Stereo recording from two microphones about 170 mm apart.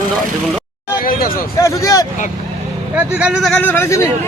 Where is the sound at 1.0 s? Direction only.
55° left (ahead or behind).